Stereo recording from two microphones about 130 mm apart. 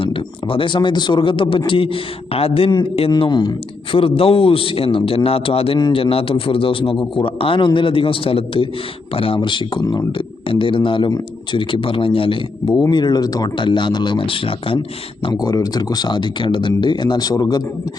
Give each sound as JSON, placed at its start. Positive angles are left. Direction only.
{"t": 0.0, "sound": "a man's voice", "side_deg": 40}
{"t": 15.3, "sound": "speech", "side_deg": 30}